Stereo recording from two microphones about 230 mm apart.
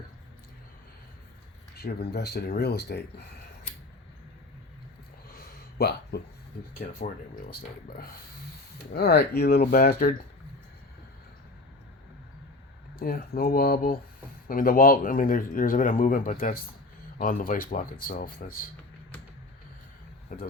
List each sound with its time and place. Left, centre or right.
2.0 s speech: left
5.3 s a sound: left
7.5 s speech: left
13.0 s speech: left
20.3 s speech: left